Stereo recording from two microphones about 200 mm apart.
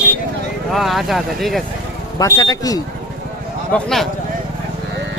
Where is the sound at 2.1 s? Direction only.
15° left (ahead or behind).